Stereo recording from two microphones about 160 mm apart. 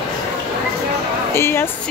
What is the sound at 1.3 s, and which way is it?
Speech, 15° left (ahead or behind).